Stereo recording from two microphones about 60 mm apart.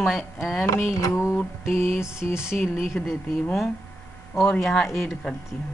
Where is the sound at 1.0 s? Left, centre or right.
Left.